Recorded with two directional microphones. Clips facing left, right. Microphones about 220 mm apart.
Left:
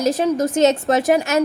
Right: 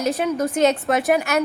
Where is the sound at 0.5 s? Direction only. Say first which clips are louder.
Left 2 dB; 25° left (ahead or behind).